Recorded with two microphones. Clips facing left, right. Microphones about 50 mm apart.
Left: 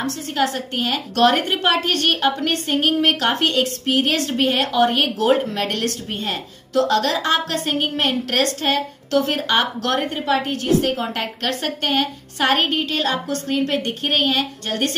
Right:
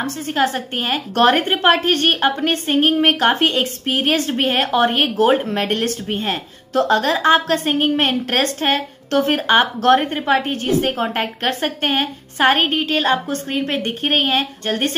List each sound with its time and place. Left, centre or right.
0.0 s a woman's voice: right